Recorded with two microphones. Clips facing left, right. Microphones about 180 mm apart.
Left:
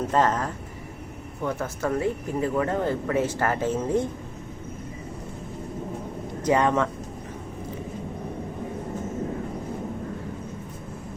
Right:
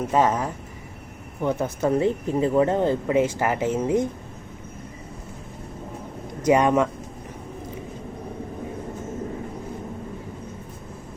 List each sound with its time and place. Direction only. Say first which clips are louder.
0.1 s speech: right 3 dB; 10° right (ahead or behind)
6.4 s speech: right 3 dB; 15° right (ahead or behind)